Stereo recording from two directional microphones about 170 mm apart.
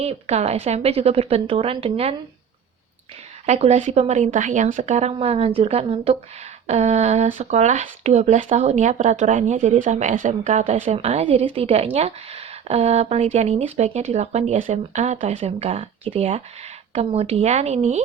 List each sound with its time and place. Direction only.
0.0 s a woman's voice: 40° right (ahead or behind)
3.4 s a woman's voice: 40° right (ahead or behind)